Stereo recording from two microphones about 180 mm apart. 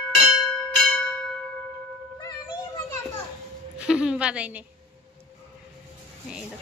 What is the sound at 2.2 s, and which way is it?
Music, 20° left (ahead or behind).